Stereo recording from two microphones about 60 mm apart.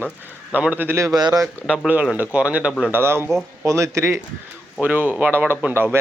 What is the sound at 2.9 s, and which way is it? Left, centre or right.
Speech, right.